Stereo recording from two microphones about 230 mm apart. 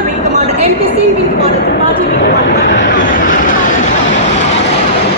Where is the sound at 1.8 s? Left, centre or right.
Left.